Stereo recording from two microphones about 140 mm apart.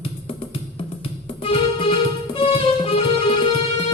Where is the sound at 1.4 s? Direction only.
40° left (ahead or behind).